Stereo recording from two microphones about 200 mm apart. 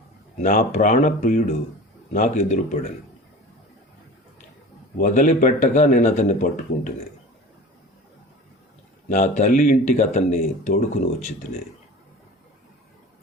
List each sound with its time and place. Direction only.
0.3 s speech: 40° left (ahead or behind)
4.9 s speech: 40° left (ahead or behind)
9.0 s speech: 40° left (ahead or behind)